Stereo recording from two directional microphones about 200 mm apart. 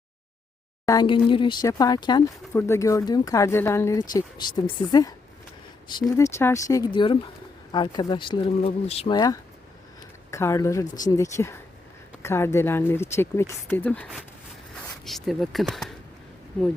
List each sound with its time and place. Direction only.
0.9 s speech: 20° left (ahead or behind); by 15.9 s centre (ahead or behind)